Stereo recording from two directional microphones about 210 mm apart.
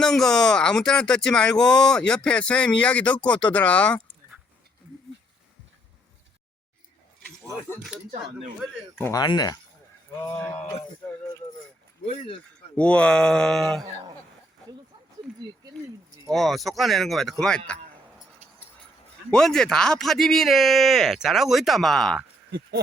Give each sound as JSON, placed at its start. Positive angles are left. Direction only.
{"t": 0.0, "sound": "speech", "side_deg": 0}
{"t": 7.8, "sound": "speech", "side_deg": 0}
{"t": 9.0, "sound": "speech", "side_deg": 15}
{"t": 11.0, "sound": "keys jangling", "side_deg": 10}
{"t": 12.0, "sound": "speech", "side_deg": 25}
{"t": 12.7, "sound": "speech", "side_deg": 5}
{"t": 16.3, "sound": "speech", "side_deg": 0}
{"t": 19.3, "sound": "speech", "side_deg": 5}